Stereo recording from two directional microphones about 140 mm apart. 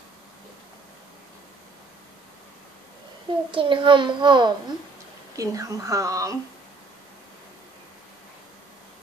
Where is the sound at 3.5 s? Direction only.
35° right (ahead or behind).